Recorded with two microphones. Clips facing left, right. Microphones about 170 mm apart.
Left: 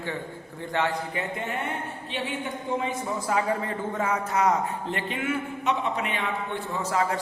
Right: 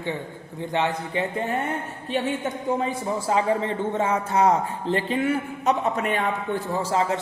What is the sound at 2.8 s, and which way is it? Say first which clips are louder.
A man's voice: right 3 dB; 30° right (ahead or behind).